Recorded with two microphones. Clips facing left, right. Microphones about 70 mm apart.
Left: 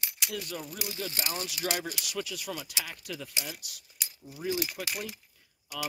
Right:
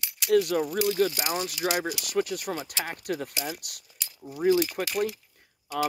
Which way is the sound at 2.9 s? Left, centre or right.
Right.